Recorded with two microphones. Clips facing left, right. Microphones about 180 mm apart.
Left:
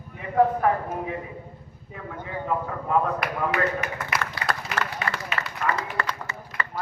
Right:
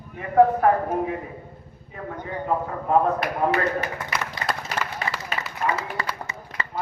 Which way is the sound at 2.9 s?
35° right (ahead or behind).